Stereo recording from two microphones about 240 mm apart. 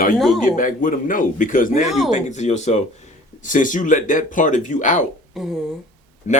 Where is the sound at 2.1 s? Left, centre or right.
Left.